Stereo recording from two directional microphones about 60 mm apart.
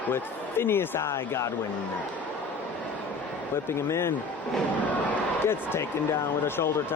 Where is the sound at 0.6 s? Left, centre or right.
Left.